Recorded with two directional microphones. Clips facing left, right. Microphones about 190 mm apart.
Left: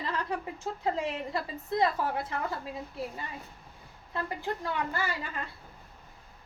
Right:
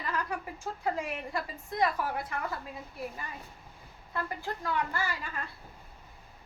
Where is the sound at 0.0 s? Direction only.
25° left (ahead or behind).